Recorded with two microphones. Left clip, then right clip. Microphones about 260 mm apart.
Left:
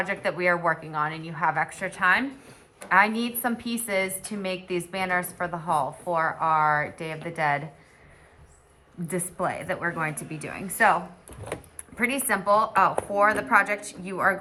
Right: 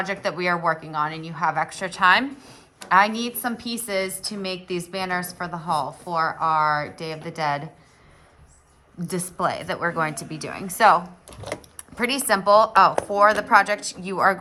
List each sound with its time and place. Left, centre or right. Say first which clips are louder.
0.0 s a woman's voice: even; centre
9.0 s a woman's voice: right 4 dB; centre